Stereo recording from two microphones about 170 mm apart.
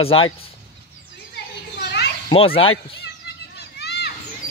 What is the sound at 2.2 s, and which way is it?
Speech, 35° left (ahead or behind).